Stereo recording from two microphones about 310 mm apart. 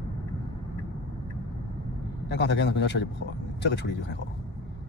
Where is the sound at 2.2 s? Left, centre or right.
Left.